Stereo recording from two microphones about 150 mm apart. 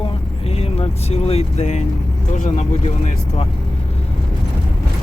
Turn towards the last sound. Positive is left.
turn(degrees=45)  # may be behind; listen again after turning